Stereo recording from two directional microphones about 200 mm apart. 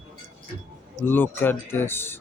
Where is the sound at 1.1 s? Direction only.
10° left (ahead or behind).